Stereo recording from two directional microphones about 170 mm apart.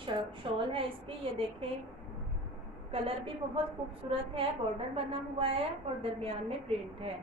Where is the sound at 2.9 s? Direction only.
35° right (ahead or behind).